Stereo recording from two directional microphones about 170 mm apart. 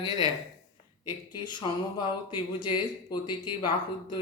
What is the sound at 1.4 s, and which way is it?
Speech, 25° left (ahead or behind).